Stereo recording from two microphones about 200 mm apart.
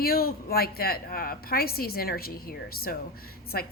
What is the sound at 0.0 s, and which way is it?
A woman's voice, 50° left (ahead or behind).